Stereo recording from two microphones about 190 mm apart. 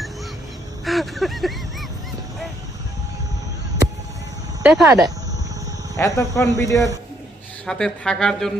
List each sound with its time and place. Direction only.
0.9 s a sound: centre (ahead or behind)
4.6 s speech: centre (ahead or behind)
6.0 s speech: 15° left (ahead or behind)
7.7 s speech: 5° left (ahead or behind)